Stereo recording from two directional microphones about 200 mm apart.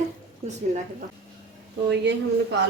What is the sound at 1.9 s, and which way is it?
Speech, 60° right (ahead or behind).